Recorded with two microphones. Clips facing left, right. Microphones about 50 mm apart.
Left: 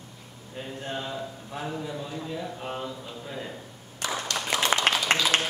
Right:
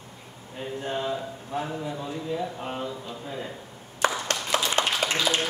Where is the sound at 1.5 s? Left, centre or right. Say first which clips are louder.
Right 2 dB; centre.